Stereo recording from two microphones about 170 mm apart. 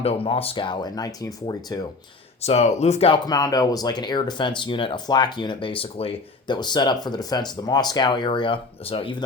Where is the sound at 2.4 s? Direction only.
40° left (ahead or behind).